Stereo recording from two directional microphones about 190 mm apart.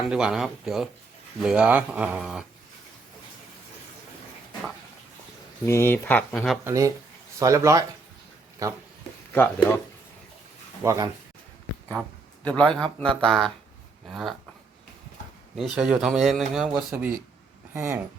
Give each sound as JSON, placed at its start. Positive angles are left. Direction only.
{"t": 0.1, "sound": "a man's voice", "side_deg": -5}
{"t": 5.6, "sound": "speech", "side_deg": 15}
{"t": 6.7, "sound": "speech", "side_deg": -15}
{"t": 9.3, "sound": "speech", "side_deg": 10}
{"t": 10.8, "sound": "speech", "side_deg": -15}
{"t": 12.5, "sound": "a man's voice", "side_deg": 5}
{"t": 15.5, "sound": "a man's voice", "side_deg": 0}